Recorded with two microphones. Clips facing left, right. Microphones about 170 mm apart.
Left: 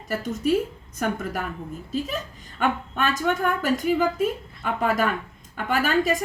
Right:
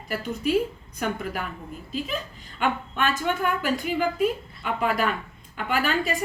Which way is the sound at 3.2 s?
40° left (ahead or behind).